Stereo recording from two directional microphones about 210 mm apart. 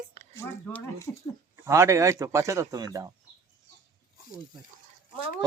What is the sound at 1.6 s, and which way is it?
Speech, 15° right (ahead or behind).